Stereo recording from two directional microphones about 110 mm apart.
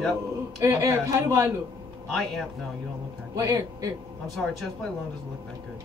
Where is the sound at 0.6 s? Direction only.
25° right (ahead or behind).